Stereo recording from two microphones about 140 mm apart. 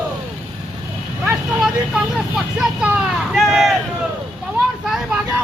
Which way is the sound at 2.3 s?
5° right (ahead or behind).